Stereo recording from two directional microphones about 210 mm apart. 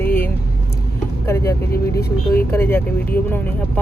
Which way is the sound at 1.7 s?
45° left (ahead or behind).